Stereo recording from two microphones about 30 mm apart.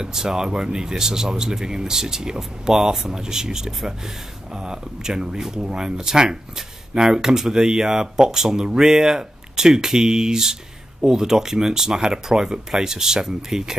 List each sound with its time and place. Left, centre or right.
0.0 s speech: centre